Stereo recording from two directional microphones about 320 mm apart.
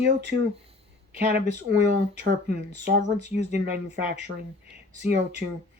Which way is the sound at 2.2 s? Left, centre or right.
Right.